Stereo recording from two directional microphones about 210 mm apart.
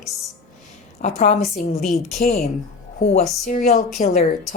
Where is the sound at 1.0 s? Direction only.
35° left (ahead or behind).